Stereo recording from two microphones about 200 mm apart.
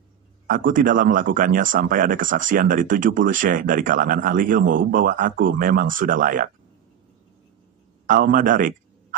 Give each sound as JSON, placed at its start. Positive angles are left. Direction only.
{"t": 0.5, "sound": "speech", "side_deg": -45}
{"t": 8.1, "sound": "speech", "side_deg": -40}